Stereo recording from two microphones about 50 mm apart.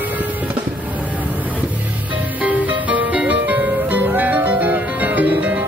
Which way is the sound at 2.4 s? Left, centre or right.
Right.